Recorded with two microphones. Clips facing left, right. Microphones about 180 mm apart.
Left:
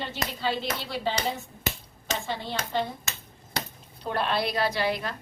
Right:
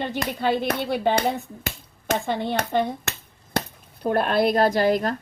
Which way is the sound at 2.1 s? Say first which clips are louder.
Right 8 dB; 55° right (ahead or behind).